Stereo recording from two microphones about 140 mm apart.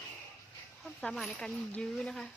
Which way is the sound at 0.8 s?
Centre (ahead or behind).